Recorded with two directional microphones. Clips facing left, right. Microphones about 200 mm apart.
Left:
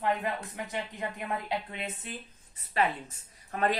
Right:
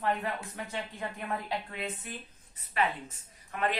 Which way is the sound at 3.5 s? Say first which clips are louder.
Left 3 dB; 40° left (ahead or behind).